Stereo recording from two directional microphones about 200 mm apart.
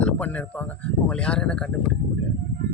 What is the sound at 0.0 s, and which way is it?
Speech, 5° left (ahead or behind).